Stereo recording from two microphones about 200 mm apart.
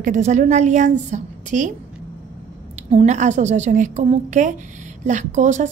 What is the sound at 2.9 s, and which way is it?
A woman's voice, 35° right (ahead or behind).